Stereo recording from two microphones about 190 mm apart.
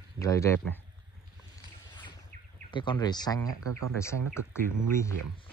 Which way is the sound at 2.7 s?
25° left (ahead or behind).